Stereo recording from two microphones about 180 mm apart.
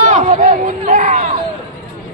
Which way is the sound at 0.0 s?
40° right (ahead or behind).